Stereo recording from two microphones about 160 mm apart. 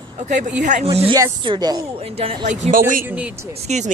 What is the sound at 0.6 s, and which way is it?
Speech, 50° right (ahead or behind).